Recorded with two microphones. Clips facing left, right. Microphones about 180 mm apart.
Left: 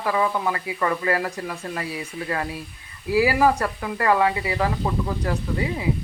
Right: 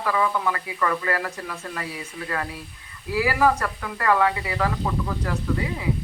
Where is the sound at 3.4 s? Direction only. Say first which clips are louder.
Left 1 dB; 25° left (ahead or behind).